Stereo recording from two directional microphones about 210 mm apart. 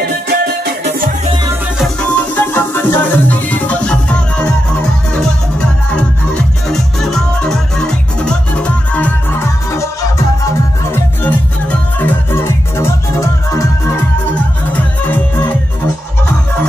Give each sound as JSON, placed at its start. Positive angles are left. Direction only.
{"t": 0.3, "sound": "music", "side_deg": -50}
{"t": 1.8, "sound": "music", "side_deg": 5}
{"t": 5.9, "sound": "music", "side_deg": 5}
{"t": 11.2, "sound": "music", "side_deg": 10}